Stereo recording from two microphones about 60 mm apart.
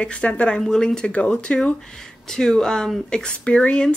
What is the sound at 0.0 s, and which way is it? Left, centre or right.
Speech, centre.